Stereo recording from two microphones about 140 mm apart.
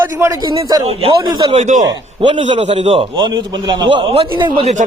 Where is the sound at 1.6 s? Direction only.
60° right (ahead or behind).